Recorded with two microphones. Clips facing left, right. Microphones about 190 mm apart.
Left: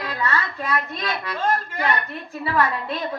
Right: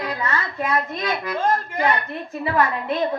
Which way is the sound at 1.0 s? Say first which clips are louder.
Right 3 dB; 20° right (ahead or behind).